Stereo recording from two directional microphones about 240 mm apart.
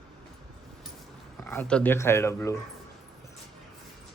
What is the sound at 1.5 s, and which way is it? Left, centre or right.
Speech, centre.